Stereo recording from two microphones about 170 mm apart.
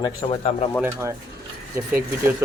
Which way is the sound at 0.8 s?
15° right (ahead or behind).